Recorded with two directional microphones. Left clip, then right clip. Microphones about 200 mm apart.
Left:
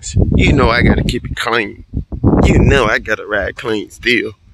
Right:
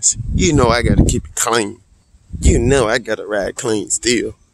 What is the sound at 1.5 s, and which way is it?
Speech, 25° right (ahead or behind).